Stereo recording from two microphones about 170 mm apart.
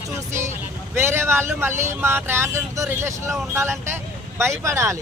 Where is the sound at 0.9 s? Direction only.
15° right (ahead or behind).